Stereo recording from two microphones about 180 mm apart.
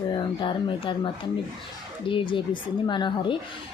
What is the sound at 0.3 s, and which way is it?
Speech, 25° left (ahead or behind).